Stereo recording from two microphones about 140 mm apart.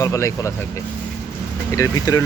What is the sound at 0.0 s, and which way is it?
Speech, 20° left (ahead or behind).